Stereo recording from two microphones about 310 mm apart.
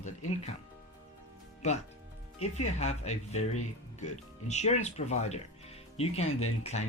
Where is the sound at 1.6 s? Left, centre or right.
Left.